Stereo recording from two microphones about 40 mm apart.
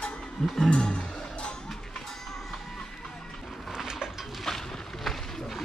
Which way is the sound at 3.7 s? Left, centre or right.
Centre.